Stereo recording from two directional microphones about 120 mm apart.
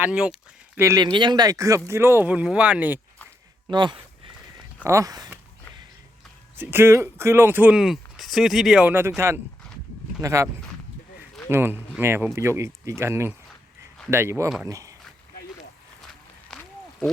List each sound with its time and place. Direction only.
0.0 s speech: 10° right (ahead or behind)
0.8 s speech: 30° right (ahead or behind); by 3.0 s 10° right (ahead or behind)
3.7 s speech: 40° right (ahead or behind)
4.8 s speech: 25° right (ahead or behind)
6.6 s speech: 15° right (ahead or behind)
8.9 s speech: 20° right (ahead or behind)
16.5 s a sound: centre (ahead or behind)